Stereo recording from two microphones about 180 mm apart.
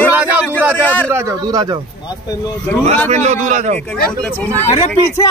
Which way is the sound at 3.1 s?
40° right (ahead or behind).